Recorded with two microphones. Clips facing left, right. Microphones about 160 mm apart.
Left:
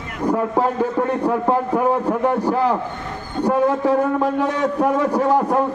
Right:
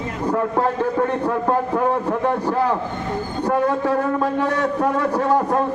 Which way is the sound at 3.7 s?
15° left (ahead or behind).